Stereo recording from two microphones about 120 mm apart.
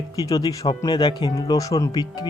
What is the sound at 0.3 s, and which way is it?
Speech, 30° left (ahead or behind).